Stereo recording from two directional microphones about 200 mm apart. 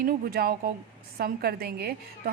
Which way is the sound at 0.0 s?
45° right (ahead or behind).